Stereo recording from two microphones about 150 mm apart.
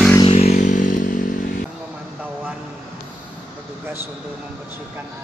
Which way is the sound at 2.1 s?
10° right (ahead or behind).